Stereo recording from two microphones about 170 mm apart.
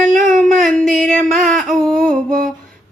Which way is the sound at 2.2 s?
55° right (ahead or behind).